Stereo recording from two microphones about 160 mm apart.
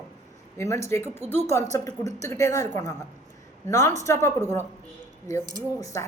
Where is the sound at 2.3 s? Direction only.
20° left (ahead or behind).